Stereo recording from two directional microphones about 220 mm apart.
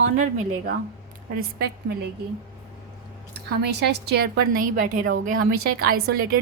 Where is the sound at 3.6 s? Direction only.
50° right (ahead or behind).